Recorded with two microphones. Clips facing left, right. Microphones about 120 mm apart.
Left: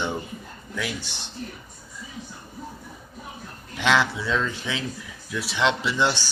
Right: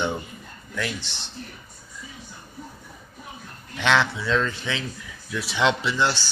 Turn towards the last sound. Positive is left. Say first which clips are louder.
# even
turn(degrees=20)  # may be behind; listen again after turning